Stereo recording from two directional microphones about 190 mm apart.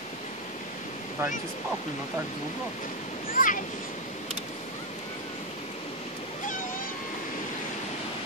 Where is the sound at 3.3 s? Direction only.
45° left (ahead or behind).